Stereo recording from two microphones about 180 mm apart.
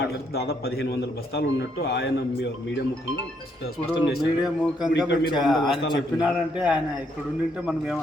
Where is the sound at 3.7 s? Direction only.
60° left (ahead or behind).